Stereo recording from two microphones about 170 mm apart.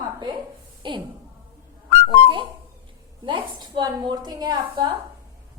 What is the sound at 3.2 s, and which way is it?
A woman's voice, 25° right (ahead or behind).